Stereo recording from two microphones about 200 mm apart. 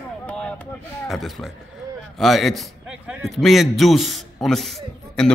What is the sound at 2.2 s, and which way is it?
A man's voice, centre (ahead or behind).